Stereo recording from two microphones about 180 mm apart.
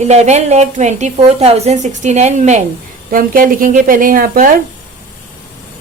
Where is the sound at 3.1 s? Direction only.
50° right (ahead or behind).